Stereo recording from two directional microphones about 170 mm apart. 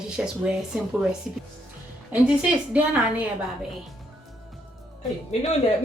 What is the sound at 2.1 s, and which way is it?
A woman's voice, 10° right (ahead or behind).